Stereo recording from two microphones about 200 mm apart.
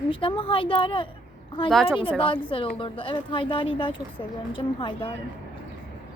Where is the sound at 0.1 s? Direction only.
25° left (ahead or behind).